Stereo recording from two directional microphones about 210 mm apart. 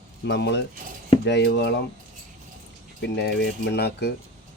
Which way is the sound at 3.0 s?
55° left (ahead or behind).